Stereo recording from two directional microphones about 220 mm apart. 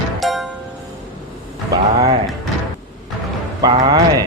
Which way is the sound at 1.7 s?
15° right (ahead or behind).